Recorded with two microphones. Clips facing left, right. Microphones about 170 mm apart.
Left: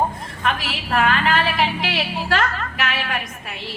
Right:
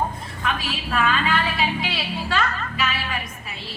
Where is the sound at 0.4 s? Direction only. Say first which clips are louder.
Left 3 dB; 65° left (ahead or behind).